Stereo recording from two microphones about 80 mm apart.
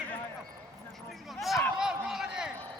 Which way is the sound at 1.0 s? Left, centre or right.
Centre.